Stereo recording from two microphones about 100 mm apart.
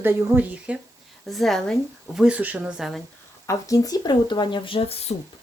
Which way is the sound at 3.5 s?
35° left (ahead or behind).